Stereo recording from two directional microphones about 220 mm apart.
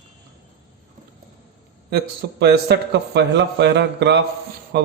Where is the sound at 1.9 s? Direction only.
50° right (ahead or behind).